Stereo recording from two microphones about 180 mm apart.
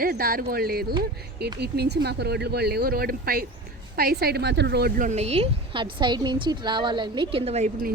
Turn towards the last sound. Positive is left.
turn(degrees=-45)  # may be behind; listen again after turning